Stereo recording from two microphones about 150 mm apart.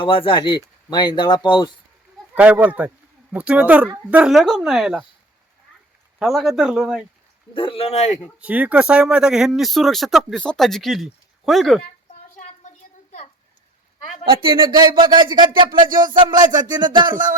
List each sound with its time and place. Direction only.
0.0 s speech: 35° left (ahead or behind)
2.3 s speech: 10° right (ahead or behind)
6.1 s speech: centre (ahead or behind)
7.5 s speech: 35° left (ahead or behind)
8.4 s speech: 10° right (ahead or behind)
12.6 s a sound: 55° left (ahead or behind)
14.3 s speech: 35° right (ahead or behind)
15.9 s speech: 65° right (ahead or behind)
16.9 s speech: 30° right (ahead or behind)